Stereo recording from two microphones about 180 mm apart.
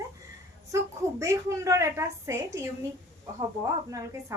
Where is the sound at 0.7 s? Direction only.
15° right (ahead or behind).